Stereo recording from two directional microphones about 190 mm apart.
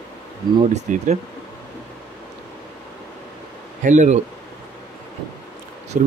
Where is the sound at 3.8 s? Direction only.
40° right (ahead or behind).